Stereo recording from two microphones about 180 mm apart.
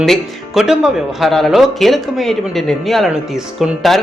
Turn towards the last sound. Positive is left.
turn(degrees=0)  # may be behind; listen again after turning